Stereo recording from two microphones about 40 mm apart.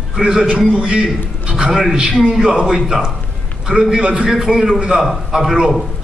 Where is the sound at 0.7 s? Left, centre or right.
Right.